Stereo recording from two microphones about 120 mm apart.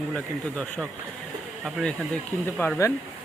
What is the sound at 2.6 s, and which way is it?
Speech, 20° left (ahead or behind).